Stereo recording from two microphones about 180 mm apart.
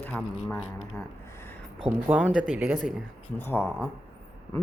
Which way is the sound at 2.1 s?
5° right (ahead or behind).